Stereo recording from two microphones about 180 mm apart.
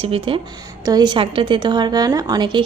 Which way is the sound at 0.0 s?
30° right (ahead or behind).